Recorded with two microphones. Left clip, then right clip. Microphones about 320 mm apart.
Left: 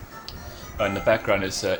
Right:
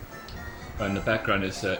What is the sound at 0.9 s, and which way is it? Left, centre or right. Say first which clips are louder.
Speech: left 4 dB; centre.